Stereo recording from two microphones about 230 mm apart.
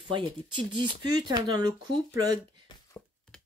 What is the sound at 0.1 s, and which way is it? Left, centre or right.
Speech, right.